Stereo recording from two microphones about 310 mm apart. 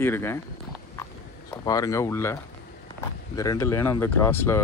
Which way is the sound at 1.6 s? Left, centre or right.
Centre.